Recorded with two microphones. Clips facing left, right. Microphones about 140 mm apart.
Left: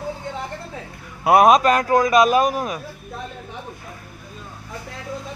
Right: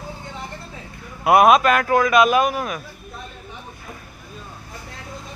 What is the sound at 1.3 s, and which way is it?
Speech, 35° left (ahead or behind).